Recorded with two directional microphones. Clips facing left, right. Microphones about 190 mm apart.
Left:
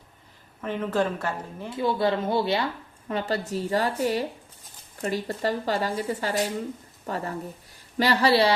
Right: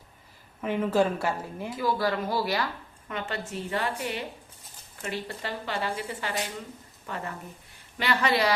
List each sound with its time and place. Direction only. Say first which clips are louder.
0.6 s a woman's voice: right 1 dB; 10° right (ahead or behind)
1.7 s speech: left 3 dB; 25° left (ahead or behind)
3.1 s speech: left 6 dB; 35° left (ahead or behind)